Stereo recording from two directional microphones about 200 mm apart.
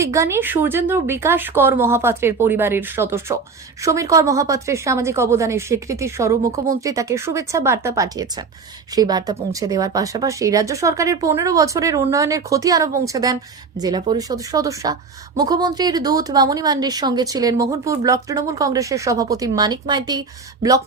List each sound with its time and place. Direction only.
0.0 s a woman's voice: 15° right (ahead or behind)